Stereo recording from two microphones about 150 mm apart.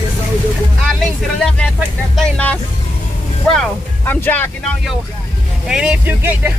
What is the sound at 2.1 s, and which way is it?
Speech, 5° left (ahead or behind).